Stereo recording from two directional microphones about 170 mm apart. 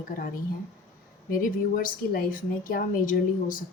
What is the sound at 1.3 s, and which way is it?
Speech, 55° left (ahead or behind).